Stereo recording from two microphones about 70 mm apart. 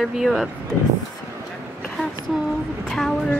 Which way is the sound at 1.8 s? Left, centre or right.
Centre.